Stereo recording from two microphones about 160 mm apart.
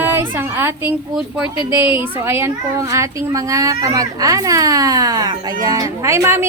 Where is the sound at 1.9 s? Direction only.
15° right (ahead or behind).